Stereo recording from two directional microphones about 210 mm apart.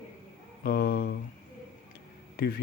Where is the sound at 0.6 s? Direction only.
50° left (ahead or behind).